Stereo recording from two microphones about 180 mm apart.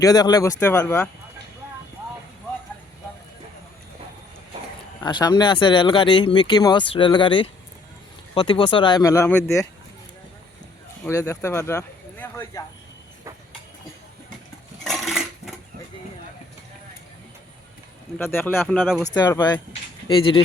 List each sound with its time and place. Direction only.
0.0 s speech: 20° left (ahead or behind)
5.0 s speech: 25° left (ahead or behind)
11.0 s speech: 15° left (ahead or behind)
14.8 s coin: centre (ahead or behind)
18.2 s speech: 10° left (ahead or behind)
18.8 s speech: 5° right (ahead or behind)
19.1 s speech: 20° left (ahead or behind)